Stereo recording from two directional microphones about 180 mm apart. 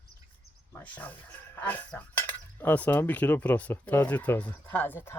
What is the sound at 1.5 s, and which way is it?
Speech, 10° left (ahead or behind).